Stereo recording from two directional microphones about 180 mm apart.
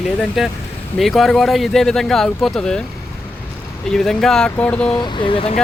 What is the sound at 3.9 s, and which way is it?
Speech, 5° left (ahead or behind).